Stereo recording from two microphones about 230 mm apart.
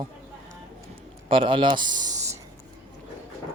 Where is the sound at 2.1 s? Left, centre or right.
Centre.